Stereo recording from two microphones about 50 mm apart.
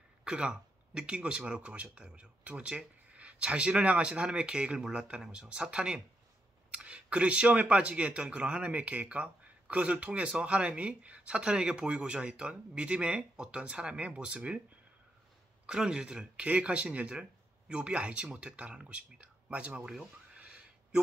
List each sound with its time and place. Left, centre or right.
0.2 s speech: centre
15.6 s speech: centre
19.8 s speech: centre
20.3 s a sound: right